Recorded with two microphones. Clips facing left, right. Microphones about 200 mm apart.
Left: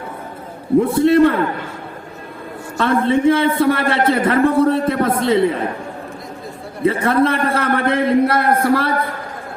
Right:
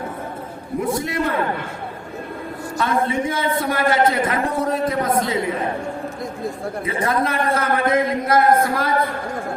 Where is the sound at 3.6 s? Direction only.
30° left (ahead or behind).